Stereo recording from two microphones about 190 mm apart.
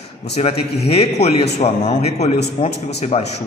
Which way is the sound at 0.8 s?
30° left (ahead or behind).